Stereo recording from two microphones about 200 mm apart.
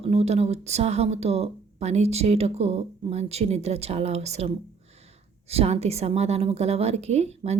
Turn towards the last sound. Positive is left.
turn(degrees=-35)  # may be behind; listen again after turning